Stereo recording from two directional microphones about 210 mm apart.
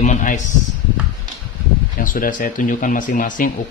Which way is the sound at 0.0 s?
35° left (ahead or behind).